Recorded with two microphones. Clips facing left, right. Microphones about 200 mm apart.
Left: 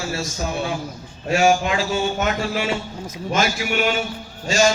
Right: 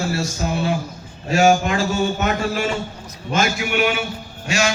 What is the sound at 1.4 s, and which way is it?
Speech, 45° right (ahead or behind).